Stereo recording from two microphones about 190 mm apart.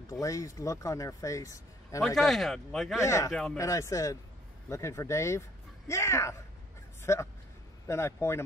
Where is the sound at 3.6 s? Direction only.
15° left (ahead or behind).